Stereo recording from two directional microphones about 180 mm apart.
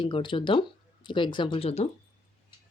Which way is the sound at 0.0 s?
25° left (ahead or behind).